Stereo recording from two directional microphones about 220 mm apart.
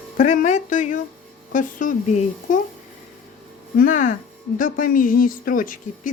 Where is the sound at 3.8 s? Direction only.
35° left (ahead or behind).